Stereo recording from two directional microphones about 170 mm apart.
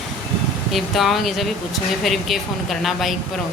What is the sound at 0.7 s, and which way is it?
A woman's voice, centre (ahead or behind).